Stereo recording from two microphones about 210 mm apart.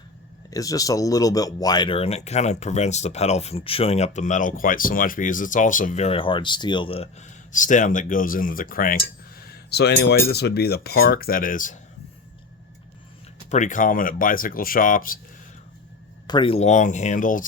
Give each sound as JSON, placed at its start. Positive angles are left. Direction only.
{"t": 0.5, "sound": "speech", "side_deg": 15}
{"t": 13.5, "sound": "speech", "side_deg": 35}
{"t": 16.2, "sound": "speech", "side_deg": 20}